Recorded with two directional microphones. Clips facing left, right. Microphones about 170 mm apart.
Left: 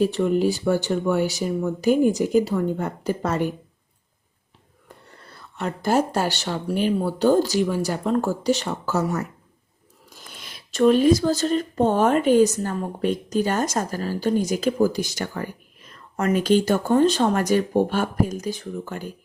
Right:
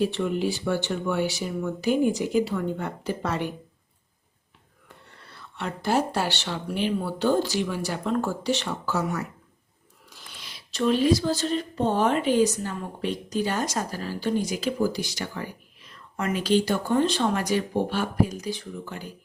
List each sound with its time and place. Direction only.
0.0 s speech: 40° left (ahead or behind)
5.3 s speech: 45° left (ahead or behind)